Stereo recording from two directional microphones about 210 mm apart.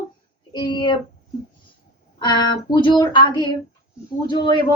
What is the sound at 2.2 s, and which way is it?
A woman's voice, 20° left (ahead or behind).